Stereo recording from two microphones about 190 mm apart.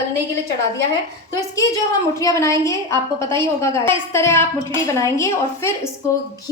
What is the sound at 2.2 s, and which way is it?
A woman's voice, 15° left (ahead or behind).